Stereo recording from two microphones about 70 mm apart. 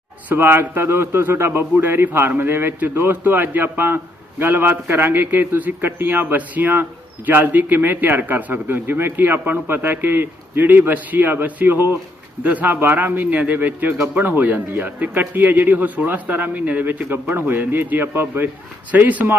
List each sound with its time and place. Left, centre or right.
0.3 s a man's voice: right